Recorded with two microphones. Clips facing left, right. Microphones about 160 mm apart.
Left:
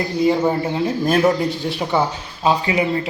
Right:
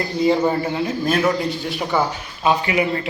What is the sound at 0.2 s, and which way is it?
Speech, 5° left (ahead or behind).